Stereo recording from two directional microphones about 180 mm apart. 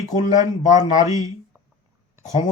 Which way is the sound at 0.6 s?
40° left (ahead or behind).